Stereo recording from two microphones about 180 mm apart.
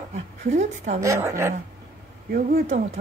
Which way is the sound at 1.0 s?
15° right (ahead or behind).